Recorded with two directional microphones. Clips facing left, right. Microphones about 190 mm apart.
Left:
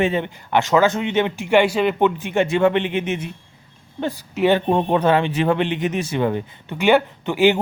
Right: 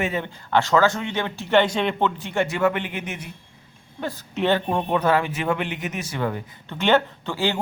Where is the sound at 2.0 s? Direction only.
20° left (ahead or behind).